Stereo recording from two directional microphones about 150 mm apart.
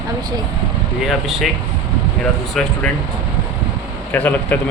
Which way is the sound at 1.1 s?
Centre (ahead or behind).